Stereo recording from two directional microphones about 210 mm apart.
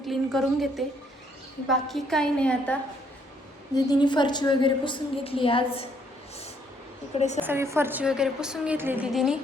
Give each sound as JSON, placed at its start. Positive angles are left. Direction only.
{"t": 0.1, "sound": "a woman's voice", "side_deg": 0}
{"t": 3.8, "sound": "a woman's voice", "side_deg": 20}
{"t": 7.2, "sound": "a woman's voice", "side_deg": 35}
{"t": 7.4, "sound": "a woman's voice", "side_deg": -10}